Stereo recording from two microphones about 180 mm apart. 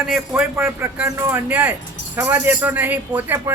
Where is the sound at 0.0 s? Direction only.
5° right (ahead or behind).